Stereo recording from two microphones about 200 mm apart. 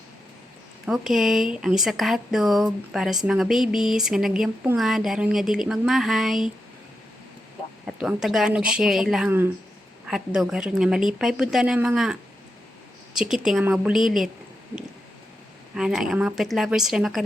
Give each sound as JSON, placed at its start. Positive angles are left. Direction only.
{"t": 0.9, "sound": "speech", "side_deg": 0}
{"t": 7.9, "sound": "speech", "side_deg": -5}
{"t": 13.1, "sound": "speech", "side_deg": 0}
{"t": 15.7, "sound": "speech", "side_deg": 0}